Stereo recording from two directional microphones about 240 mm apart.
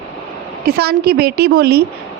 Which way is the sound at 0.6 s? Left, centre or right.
Right.